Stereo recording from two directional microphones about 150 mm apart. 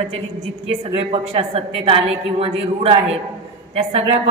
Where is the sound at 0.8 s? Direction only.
40° right (ahead or behind).